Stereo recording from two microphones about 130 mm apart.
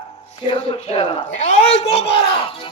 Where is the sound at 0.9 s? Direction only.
65° left (ahead or behind).